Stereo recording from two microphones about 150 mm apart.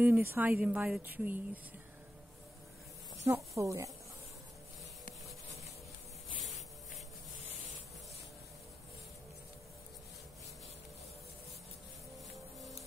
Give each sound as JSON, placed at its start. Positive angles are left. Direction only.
{"t": 0.0, "sound": "speech", "side_deg": -15}
{"t": 3.3, "sound": "speech", "side_deg": -20}